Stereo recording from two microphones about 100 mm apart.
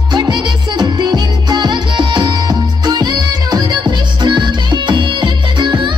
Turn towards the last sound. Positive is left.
turn(degrees=-50)  # may be behind; listen again after turning